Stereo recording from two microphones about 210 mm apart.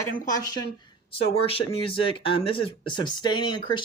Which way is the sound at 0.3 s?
15° left (ahead or behind).